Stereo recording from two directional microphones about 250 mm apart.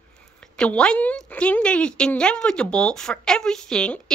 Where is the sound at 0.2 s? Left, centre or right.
Centre.